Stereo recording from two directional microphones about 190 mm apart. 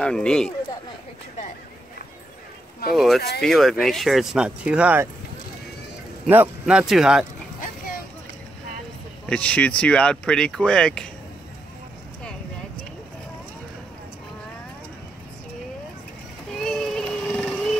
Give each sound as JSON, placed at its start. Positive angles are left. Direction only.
{"t": 0.0, "sound": "speech", "side_deg": 5}
{"t": 2.9, "sound": "speech", "side_deg": 0}
{"t": 3.2, "sound": "speech", "side_deg": 55}
{"t": 3.4, "sound": "speech", "side_deg": 0}
{"t": 6.2, "sound": "speech", "side_deg": -10}
{"t": 9.2, "sound": "speech", "side_deg": 5}
{"t": 16.5, "sound": "a sound", "side_deg": 0}